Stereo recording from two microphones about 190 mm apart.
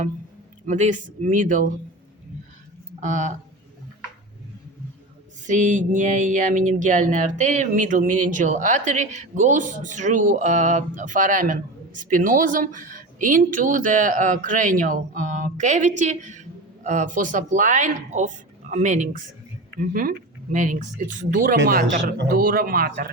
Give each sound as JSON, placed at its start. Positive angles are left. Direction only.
{"t": 0.6, "sound": "speech", "side_deg": -40}
{"t": 3.0, "sound": "speech", "side_deg": -40}
{"t": 5.5, "sound": "speech", "side_deg": -40}